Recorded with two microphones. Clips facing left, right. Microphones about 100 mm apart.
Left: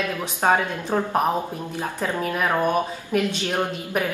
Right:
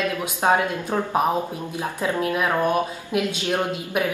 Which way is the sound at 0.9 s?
Centre (ahead or behind).